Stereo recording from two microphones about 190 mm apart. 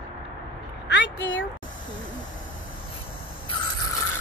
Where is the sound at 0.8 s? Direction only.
70° left (ahead or behind).